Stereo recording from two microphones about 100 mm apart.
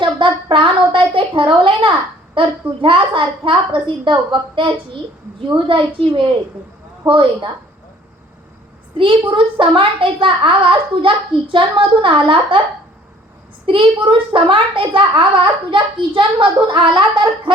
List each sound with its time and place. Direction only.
0.0 s a child's voice: 55° right (ahead or behind)
9.0 s a child's voice: 60° right (ahead or behind)
13.7 s a child's voice: 60° right (ahead or behind)